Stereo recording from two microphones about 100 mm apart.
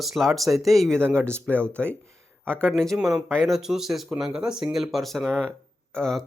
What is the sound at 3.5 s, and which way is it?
Speech, 5° right (ahead or behind).